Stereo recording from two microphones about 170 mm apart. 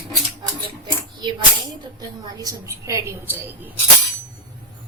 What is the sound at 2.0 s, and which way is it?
A woman's voice, 20° right (ahead or behind).